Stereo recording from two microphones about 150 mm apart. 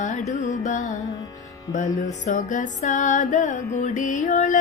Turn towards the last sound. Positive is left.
turn(degrees=55)  # may be behind; listen again after turning